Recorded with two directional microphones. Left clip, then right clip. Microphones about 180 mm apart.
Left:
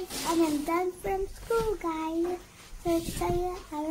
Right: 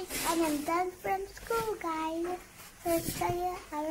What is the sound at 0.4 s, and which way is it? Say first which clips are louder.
A child's voice: left 4 dB; centre (ahead or behind).